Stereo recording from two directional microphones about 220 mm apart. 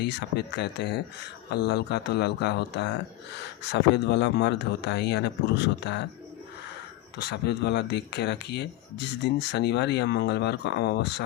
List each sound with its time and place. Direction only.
0.0 s speech: 50° left (ahead or behind)
7.2 s speech: 50° left (ahead or behind)